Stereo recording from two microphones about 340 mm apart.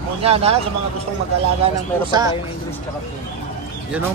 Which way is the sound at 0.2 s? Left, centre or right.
Centre.